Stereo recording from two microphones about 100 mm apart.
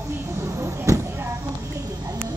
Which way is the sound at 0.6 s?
30° right (ahead or behind).